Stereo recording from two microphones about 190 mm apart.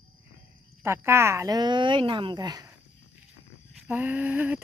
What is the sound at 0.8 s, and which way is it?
Speech, 15° right (ahead or behind).